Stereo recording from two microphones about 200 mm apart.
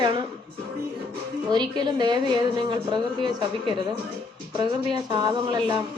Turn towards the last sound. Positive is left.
turn(degrees=-20)  # may be behind; listen again after turning